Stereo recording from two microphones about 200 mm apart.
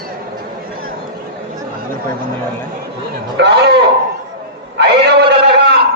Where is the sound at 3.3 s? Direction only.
55° right (ahead or behind).